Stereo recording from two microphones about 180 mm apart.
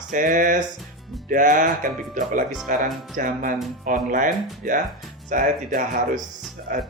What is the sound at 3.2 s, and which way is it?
Speech, 50° right (ahead or behind).